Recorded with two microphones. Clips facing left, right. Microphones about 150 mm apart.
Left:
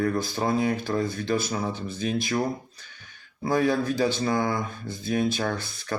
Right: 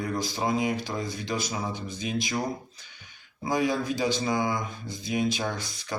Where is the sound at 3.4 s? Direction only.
15° right (ahead or behind).